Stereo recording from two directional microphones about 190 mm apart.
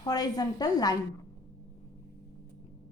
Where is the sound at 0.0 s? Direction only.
20° left (ahead or behind).